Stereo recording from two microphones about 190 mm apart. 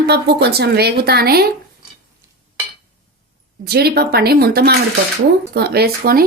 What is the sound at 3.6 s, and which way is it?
A woman's voice, 55° right (ahead or behind).